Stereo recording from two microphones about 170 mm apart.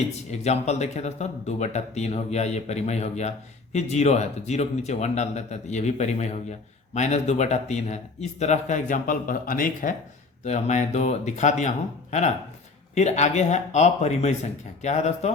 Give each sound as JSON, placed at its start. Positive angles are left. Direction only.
{"t": 0.3, "sound": "speech", "side_deg": 40}
{"t": 10.4, "sound": "speech", "side_deg": 45}
{"t": 12.9, "sound": "speech", "side_deg": 40}